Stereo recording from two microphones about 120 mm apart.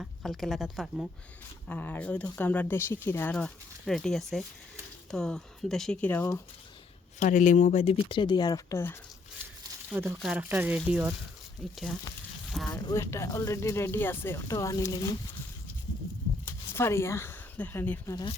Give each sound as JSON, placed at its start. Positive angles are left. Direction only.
{"t": 0.0, "sound": "speech", "side_deg": 0}
{"t": 1.6, "sound": "speech", "side_deg": 15}
{"t": 3.3, "sound": "speech", "side_deg": 5}
{"t": 7.2, "sound": "speech", "side_deg": 90}
{"t": 8.1, "sound": "speech", "side_deg": 40}
{"t": 8.7, "sound": "speech", "side_deg": 20}
{"t": 9.9, "sound": "speech", "side_deg": -15}
{"t": 12.5, "sound": "speech", "side_deg": 0}
{"t": 12.7, "sound": "speech", "side_deg": 25}
{"t": 16.5, "sound": "speech", "side_deg": 20}